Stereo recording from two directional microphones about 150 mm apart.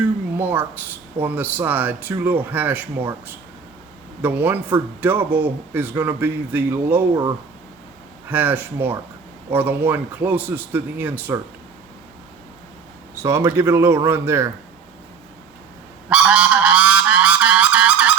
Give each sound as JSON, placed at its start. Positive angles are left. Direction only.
{"t": 0.3, "sound": "speech", "side_deg": -15}
{"t": 8.3, "sound": "speech", "side_deg": -15}
{"t": 13.2, "sound": "speech", "side_deg": -20}
{"t": 16.0, "sound": "goose", "side_deg": -10}